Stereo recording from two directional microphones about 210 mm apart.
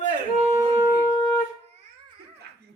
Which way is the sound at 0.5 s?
15° right (ahead or behind).